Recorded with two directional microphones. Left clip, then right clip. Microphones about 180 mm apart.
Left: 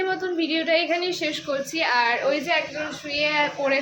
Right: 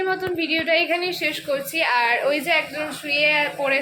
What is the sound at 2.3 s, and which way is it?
Speech, 25° right (ahead or behind).